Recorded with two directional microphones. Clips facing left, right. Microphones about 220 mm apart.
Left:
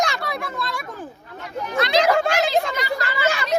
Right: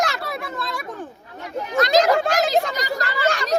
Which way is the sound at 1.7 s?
45° right (ahead or behind).